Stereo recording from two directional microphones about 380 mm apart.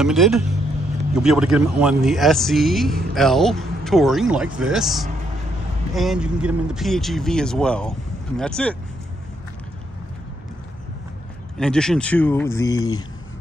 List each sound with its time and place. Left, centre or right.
0.0 s speech: centre
11.5 s speech: centre